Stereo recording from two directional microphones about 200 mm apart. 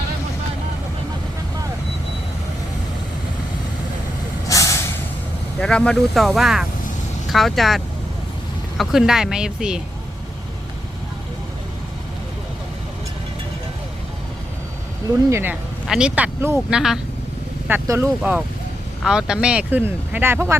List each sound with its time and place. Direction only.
4.4 s vehicle: 15° left (ahead or behind)
5.5 s speech: 5° left (ahead or behind)
8.8 s speech: centre (ahead or behind)
15.3 s speech: 10° right (ahead or behind)
18.2 s speech: 5° right (ahead or behind)